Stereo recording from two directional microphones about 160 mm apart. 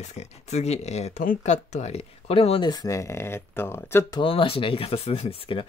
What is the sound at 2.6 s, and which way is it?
Speech, 20° left (ahead or behind).